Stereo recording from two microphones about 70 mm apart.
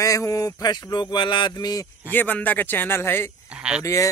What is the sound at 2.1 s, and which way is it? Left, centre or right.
Speech, left.